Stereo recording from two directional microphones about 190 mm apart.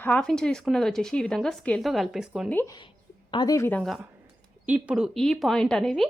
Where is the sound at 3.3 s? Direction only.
20° left (ahead or behind).